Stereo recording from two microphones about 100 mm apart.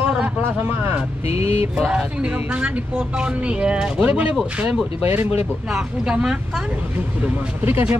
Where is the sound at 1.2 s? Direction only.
85° left.